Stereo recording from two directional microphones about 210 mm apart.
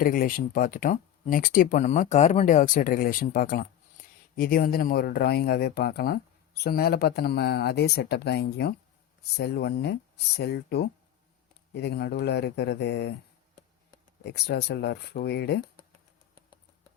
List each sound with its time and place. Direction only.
0.0 s speech: 40° left (ahead or behind)
14.3 s speech: 55° left (ahead or behind)